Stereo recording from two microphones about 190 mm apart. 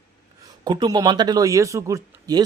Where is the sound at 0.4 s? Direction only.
20° right (ahead or behind).